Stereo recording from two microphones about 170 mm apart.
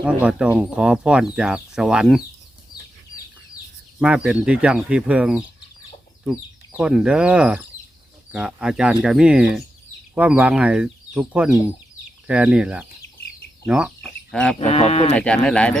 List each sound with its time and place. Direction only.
0.0 s speech: 5° right (ahead or behind)
4.0 s speech: 5° right (ahead or behind)
14.0 s bird: 5° left (ahead or behind)
14.6 s speech: 40° left (ahead or behind)
15.1 s speech: 5° left (ahead or behind)